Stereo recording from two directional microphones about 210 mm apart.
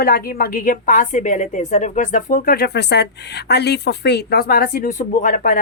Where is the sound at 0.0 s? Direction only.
45° left (ahead or behind).